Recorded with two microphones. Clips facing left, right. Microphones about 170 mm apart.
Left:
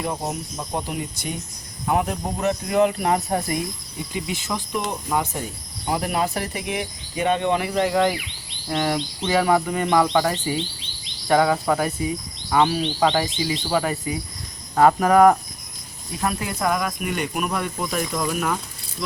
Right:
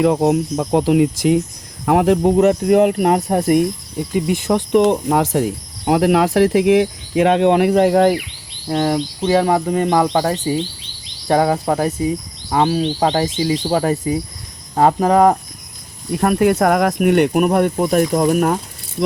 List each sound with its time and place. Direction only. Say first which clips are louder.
0.0 s speech: right 13 dB; 80° right; by 8.2 s 50° right (ahead or behind)
8.7 s speech: right 6 dB; 35° right (ahead or behind)
16.1 s speech: right 12 dB; 55° right (ahead or behind)